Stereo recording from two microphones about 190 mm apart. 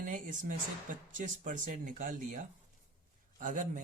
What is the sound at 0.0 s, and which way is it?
Speech, 40° right (ahead or behind).